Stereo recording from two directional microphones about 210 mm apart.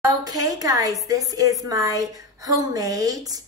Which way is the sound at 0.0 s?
15° right (ahead or behind).